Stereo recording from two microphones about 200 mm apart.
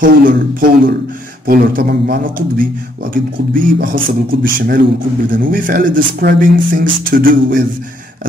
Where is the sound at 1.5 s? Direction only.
50° right (ahead or behind).